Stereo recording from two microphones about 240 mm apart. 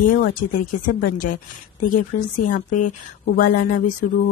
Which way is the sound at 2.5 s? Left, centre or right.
Left.